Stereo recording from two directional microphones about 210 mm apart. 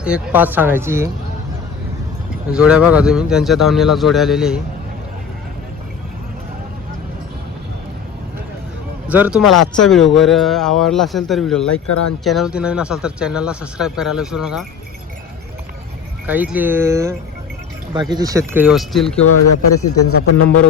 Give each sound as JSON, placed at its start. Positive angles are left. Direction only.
{"t": 0.0, "sound": "speech", "side_deg": -5}
{"t": 2.5, "sound": "speech", "side_deg": -5}
{"t": 9.0, "sound": "speech", "side_deg": -5}
{"t": 16.2, "sound": "speech", "side_deg": -10}
{"t": 19.2, "sound": "a man's voice", "side_deg": 90}